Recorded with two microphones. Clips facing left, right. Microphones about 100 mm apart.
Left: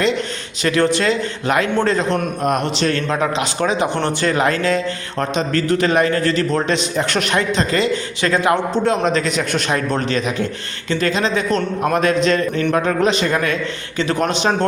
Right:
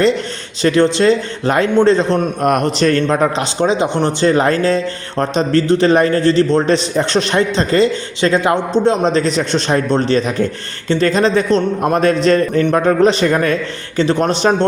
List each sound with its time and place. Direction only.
0.6 s a man's voice: 25° right (ahead or behind)
2.4 s a man's voice: 50° right (ahead or behind)
3.6 s speech: 20° right (ahead or behind)